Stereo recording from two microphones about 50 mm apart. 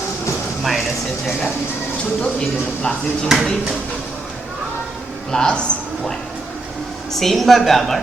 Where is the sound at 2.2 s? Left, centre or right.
Centre.